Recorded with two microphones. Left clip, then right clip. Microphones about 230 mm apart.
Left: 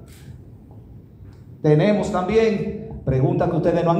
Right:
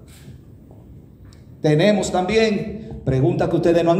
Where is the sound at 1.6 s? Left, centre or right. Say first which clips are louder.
Right 1 dB; right.